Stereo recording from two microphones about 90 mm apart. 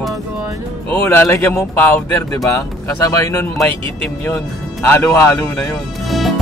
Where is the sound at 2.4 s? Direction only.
35° left (ahead or behind).